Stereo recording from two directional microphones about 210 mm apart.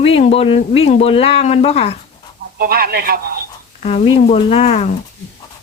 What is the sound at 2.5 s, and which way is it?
Speech, 45° right (ahead or behind).